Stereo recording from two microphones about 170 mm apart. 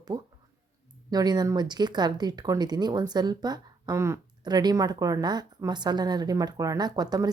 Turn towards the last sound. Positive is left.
turn(degrees=-25)  # may be behind; listen again after turning